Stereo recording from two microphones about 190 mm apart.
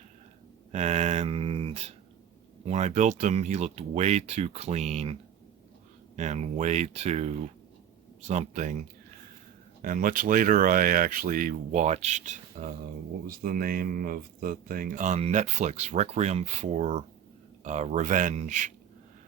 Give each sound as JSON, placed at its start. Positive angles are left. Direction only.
{"t": 0.7, "sound": "mantra", "side_deg": -35}
{"t": 2.6, "sound": "speech", "side_deg": -35}
{"t": 6.1, "sound": "speech", "side_deg": -40}